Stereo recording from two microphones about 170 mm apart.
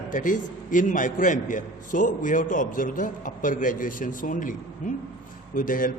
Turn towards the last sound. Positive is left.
turn(degrees=55)  # may be behind; listen again after turning